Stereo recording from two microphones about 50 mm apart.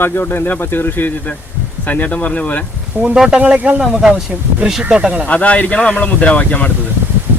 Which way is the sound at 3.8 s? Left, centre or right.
Centre.